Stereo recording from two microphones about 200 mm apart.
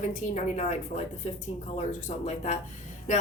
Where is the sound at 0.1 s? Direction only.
35° left (ahead or behind).